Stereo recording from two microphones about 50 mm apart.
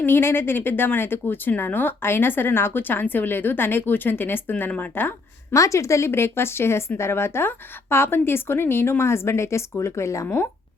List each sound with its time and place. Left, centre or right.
0.0 s speech: left
5.5 s a woman's voice: left
6.1 s speech: left